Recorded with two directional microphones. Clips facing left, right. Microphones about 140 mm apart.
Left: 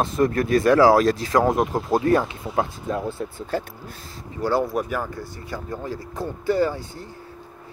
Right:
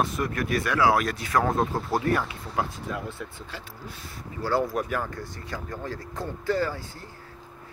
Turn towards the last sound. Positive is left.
turn(degrees=15)  # may be behind; listen again after turning